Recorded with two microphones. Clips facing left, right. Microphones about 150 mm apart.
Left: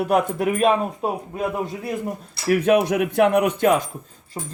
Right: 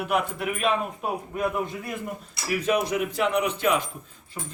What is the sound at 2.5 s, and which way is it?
Speech, 55° left (ahead or behind).